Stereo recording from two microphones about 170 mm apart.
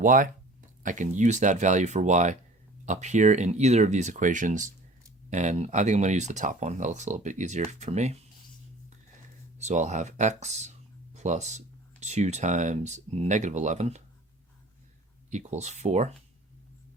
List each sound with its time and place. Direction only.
0.0 s speech: 50° right (ahead or behind)
9.6 s speech: 40° right (ahead or behind)
15.3 s speech: 45° right (ahead or behind)